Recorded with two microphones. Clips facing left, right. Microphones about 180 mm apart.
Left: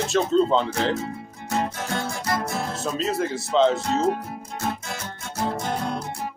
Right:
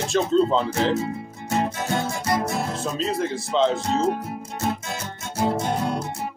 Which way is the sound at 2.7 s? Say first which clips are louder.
Even; centre (ahead or behind).